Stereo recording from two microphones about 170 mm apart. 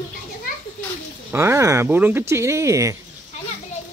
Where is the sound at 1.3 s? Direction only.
15° right (ahead or behind).